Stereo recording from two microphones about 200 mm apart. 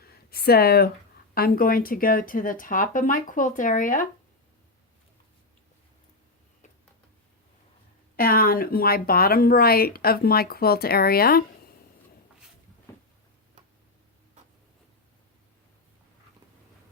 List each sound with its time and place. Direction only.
0.0 s a sound: 50° left (ahead or behind)
1.4 s speech: 45° left (ahead or behind)
8.1 s speech: 45° left (ahead or behind)